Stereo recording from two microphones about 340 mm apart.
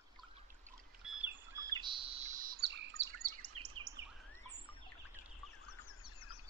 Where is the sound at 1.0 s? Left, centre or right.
Centre; by 3.9 s right.